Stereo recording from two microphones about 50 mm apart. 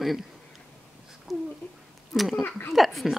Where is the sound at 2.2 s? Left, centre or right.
Centre.